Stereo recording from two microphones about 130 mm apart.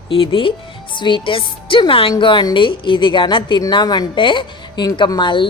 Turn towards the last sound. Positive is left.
turn(degrees=40)  # may be behind; listen again after turning